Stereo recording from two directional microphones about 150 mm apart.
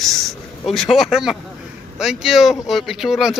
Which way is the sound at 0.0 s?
Centre (ahead or behind).